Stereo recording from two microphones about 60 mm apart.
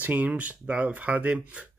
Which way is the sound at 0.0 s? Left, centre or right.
Right.